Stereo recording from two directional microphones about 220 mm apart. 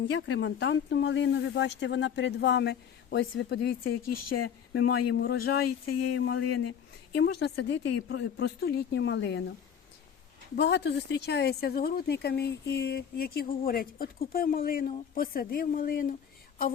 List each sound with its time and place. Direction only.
0.0 s speech: 55° left (ahead or behind)
4.4 s speech: 80° left
5.1 s speech: 50° left (ahead or behind)
5.6 s speech: 90° left; by 6.7 s 70° left (ahead or behind)
7.2 s speech: 50° left (ahead or behind)
10.5 s speech: 50° left (ahead or behind)